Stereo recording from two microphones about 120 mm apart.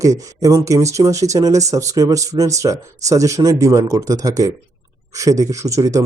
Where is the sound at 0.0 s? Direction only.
30° right (ahead or behind).